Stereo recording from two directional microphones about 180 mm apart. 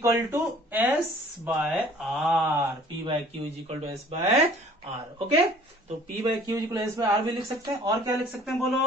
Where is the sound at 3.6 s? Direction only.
35° right (ahead or behind).